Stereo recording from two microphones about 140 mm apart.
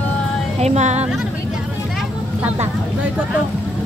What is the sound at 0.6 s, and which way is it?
Speech, 50° right (ahead or behind).